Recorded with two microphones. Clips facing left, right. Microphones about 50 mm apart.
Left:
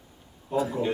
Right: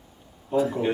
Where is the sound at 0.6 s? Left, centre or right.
Right.